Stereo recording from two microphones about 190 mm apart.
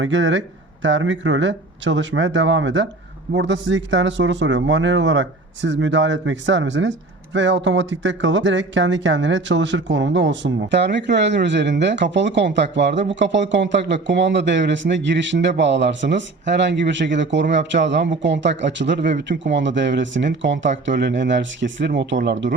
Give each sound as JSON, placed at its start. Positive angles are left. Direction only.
{"t": 0.0, "sound": "speech", "side_deg": -80}